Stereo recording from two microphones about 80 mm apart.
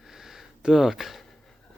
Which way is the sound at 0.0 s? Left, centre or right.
Centre.